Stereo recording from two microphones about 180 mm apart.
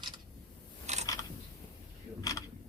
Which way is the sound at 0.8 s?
40° right (ahead or behind).